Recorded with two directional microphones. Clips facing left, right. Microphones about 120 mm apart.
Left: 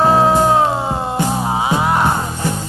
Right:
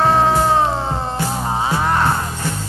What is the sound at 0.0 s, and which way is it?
Music, 5° left (ahead or behind).